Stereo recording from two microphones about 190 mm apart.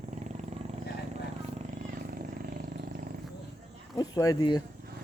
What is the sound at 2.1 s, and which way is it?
Vehicle, 50° right (ahead or behind).